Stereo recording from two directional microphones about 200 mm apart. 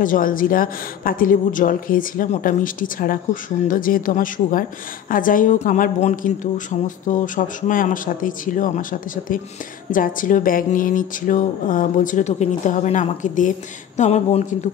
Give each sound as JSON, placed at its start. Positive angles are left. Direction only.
{"t": 0.0, "sound": "a woman's voice", "side_deg": 45}